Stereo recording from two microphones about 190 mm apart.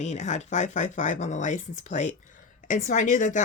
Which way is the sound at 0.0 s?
40° left (ahead or behind).